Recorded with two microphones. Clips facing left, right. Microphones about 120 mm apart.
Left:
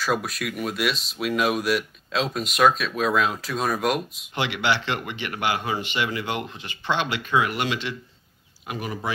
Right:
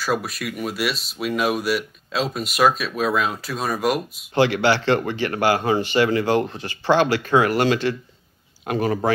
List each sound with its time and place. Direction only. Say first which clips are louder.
0.0 s speech: right 1 dB; centre (ahead or behind)
4.4 s speech: right 7 dB; 35° right (ahead or behind)